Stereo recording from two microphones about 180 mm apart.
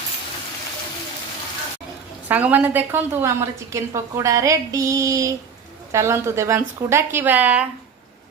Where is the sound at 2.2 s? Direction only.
10° right (ahead or behind).